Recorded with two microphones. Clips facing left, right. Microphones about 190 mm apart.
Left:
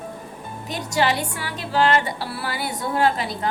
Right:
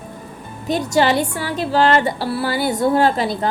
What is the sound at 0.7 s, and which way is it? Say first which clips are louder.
Speech: right 6 dB; 30° right (ahead or behind).